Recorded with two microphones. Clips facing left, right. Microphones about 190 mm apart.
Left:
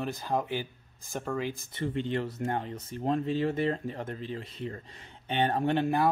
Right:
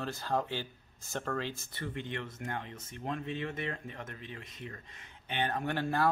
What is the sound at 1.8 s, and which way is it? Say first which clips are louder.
Speech: left 9 dB; 30° left (ahead or behind).